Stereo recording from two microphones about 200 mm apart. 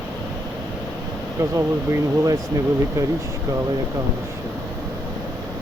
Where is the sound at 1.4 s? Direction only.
15° right (ahead or behind).